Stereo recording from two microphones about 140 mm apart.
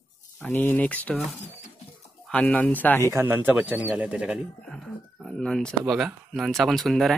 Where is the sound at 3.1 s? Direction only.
15° right (ahead or behind).